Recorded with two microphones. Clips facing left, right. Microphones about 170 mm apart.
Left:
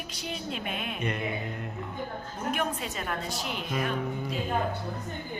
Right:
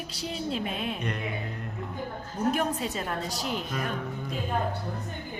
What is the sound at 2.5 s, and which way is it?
A woman's voice, 35° right (ahead or behind).